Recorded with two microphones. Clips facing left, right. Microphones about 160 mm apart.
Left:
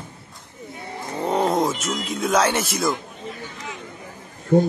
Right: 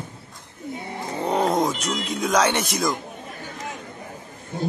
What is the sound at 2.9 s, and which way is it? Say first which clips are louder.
Chatter: left 2 dB; 45° right (ahead or behind).